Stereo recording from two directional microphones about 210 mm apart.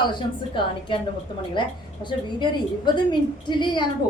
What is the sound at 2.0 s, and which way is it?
A woman's voice, 20° left (ahead or behind).